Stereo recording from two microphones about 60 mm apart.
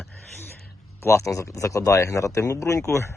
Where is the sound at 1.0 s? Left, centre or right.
Left.